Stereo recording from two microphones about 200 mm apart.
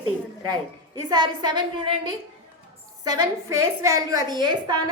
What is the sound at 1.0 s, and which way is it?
A woman's voice, 20° right (ahead or behind).